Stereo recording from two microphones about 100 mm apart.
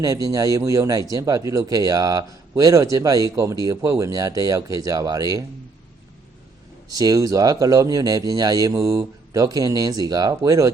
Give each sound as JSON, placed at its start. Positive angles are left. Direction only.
{"t": 0.0, "sound": "speech", "side_deg": -35}
{"t": 6.9, "sound": "speech", "side_deg": -40}